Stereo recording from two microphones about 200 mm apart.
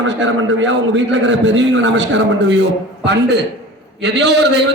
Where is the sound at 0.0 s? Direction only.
65° right (ahead or behind).